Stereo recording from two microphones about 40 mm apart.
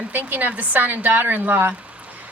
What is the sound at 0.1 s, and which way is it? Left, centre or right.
A woman's voice, right.